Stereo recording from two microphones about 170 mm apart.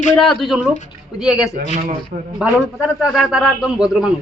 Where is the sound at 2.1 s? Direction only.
60° right (ahead or behind).